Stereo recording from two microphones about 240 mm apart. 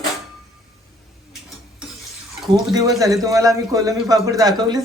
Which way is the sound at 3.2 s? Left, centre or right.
Centre.